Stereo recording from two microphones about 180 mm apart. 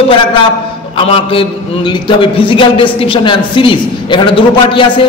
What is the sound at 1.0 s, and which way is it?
A man's voice, 30° left (ahead or behind).